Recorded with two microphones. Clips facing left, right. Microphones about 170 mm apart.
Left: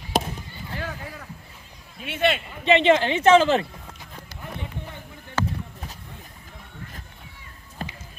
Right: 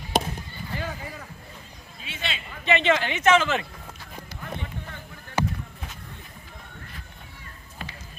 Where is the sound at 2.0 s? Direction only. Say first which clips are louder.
Left 12 dB; 55° left (ahead or behind).